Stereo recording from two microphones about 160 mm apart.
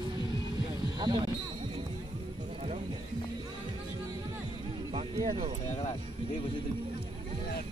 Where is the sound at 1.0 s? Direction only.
25° right (ahead or behind).